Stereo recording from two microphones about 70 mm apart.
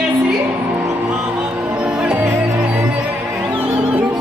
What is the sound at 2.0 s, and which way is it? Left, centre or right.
Music, right.